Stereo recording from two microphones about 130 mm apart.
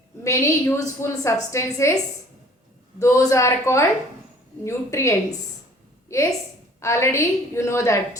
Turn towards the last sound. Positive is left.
turn(degrees=25)  # may be behind; listen again after turning